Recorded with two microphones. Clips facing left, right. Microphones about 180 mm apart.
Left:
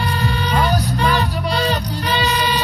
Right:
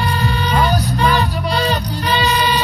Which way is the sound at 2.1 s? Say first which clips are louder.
Right 3 dB; 5° left (ahead or behind).